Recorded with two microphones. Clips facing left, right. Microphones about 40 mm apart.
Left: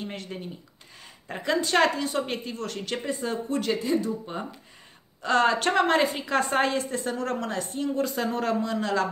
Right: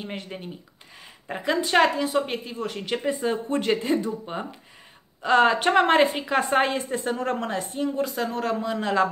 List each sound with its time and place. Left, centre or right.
0.0 s speech: centre
3.5 s speech: right